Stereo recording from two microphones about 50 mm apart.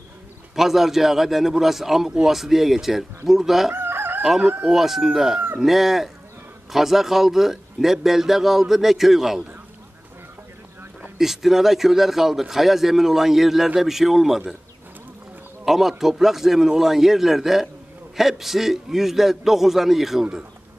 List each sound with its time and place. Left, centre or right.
0.6 s a man's voice: centre
3.7 s chicken: right
4.4 s speech: right
4.6 s a man's voice: centre
11.1 s a man's voice: centre
15.6 s a man's voice: centre